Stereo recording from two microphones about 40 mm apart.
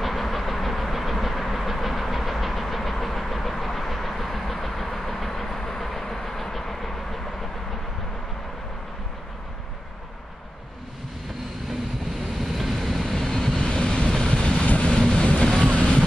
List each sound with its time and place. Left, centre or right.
0.0 s vehicle: centre
12.4 s vehicle: centre
13.0 s vehicle: centre
13.5 s vehicle: left